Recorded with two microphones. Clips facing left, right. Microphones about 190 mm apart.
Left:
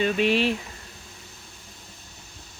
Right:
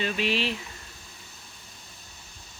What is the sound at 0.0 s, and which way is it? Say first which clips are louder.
Speech: left 6 dB; 50° left (ahead or behind).